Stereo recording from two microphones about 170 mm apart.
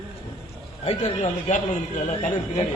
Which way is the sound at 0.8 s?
35° left (ahead or behind).